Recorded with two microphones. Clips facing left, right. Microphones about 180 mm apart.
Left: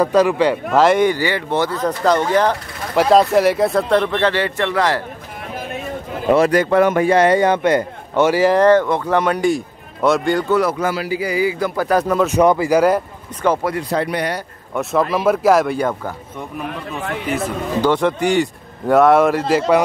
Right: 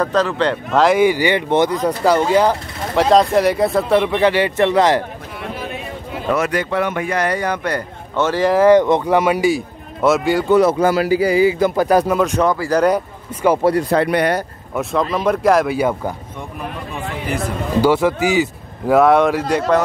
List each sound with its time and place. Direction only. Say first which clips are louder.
0.0 s speech: left 3 dB; 10° left (ahead or behind); by 2.5 s 10° right (ahead or behind)
3.0 s speech: even; centre (ahead or behind); by 5.0 s 20° right (ahead or behind)
6.3 s speech: left 6 dB; 35° left (ahead or behind)
7.1 s a man's voice: left 6 dB; 25° left (ahead or behind)
8.3 s speech: left 1 dB; 5° left (ahead or behind)
8.5 s speech: right 2 dB; 15° right (ahead or behind)
10.5 s speech: right 7 dB; 25° right (ahead or behind)
10.9 s speech: right 6 dB; 40° right (ahead or behind); by 12.2 s 15° right (ahead or behind)
12.4 s speech: left 3 dB; 15° left (ahead or behind)
12.7 s speech: right 2 dB; 5° left (ahead or behind)
13.7 s speech: right 4 dB; 55° right (ahead or behind)
14.8 s speech: left 1 dB; 5° left (ahead or behind)
17.7 s speech: right 2 dB; 5° right (ahead or behind)